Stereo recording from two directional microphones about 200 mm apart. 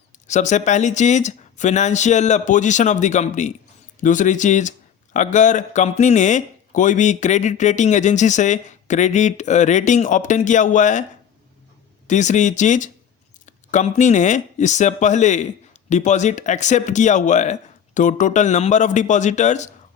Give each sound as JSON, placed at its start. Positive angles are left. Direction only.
{"t": 0.3, "sound": "speech", "side_deg": 35}
{"t": 12.0, "sound": "speech", "side_deg": 35}